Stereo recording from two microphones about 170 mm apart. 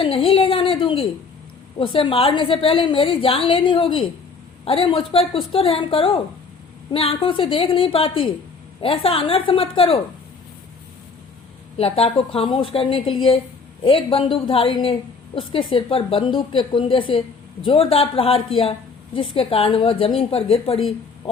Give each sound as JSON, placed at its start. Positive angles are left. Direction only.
{"t": 0.0, "sound": "a sound", "side_deg": 30}
{"t": 1.8, "sound": "a woman's voice", "side_deg": 30}
{"t": 11.8, "sound": "a woman's voice", "side_deg": 35}